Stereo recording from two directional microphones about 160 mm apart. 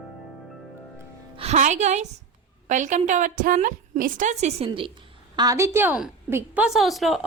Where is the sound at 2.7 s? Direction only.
50° right (ahead or behind); by 4.9 s 35° right (ahead or behind).